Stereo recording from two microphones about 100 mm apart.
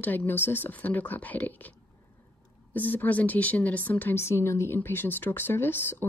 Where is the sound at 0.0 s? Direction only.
20° left (ahead or behind).